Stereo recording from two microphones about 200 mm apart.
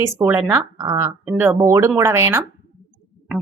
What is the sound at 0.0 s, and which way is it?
A woman's voice, 10° right (ahead or behind).